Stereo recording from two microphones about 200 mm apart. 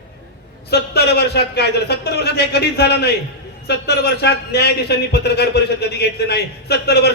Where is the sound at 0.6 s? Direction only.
55° left (ahead or behind).